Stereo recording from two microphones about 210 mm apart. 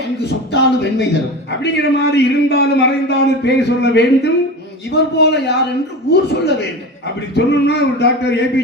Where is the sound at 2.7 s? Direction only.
55° left (ahead or behind).